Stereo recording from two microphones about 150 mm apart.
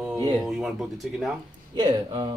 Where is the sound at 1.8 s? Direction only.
25° right (ahead or behind).